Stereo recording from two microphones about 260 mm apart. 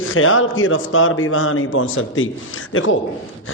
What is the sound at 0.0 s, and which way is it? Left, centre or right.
A man's voice, left.